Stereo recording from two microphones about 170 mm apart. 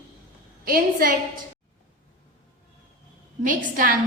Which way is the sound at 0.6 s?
60° right (ahead or behind).